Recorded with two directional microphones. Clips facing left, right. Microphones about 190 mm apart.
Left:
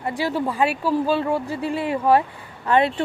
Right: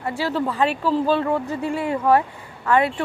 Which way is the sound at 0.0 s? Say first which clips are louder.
Even; 15° left (ahead or behind).